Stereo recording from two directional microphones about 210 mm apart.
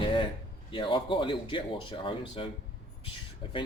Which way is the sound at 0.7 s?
25° left (ahead or behind).